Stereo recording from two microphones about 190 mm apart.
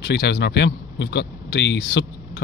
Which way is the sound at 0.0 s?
60° left (ahead or behind).